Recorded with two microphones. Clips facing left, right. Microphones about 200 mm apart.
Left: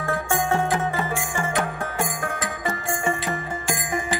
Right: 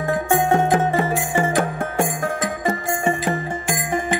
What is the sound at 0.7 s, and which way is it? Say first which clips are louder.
Music: right 6 dB; 30° right (ahead or behind).